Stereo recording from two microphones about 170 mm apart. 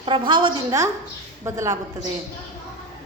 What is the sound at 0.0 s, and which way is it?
A woman's voice, 30° right (ahead or behind).